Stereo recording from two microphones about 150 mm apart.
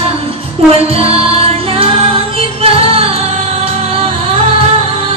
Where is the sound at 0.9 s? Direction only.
40° right (ahead or behind).